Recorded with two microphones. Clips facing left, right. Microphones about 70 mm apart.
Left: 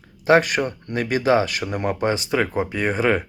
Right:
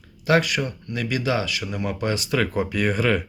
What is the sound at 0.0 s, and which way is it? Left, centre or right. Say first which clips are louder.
Speech: left 4 dB; left.